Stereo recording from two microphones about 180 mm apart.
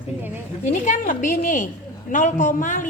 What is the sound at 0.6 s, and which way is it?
A woman's voice, 45° left (ahead or behind).